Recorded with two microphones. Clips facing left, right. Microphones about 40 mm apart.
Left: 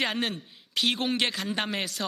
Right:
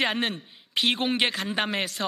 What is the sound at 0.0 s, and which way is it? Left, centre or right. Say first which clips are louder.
A man's voice: right 3 dB; centre.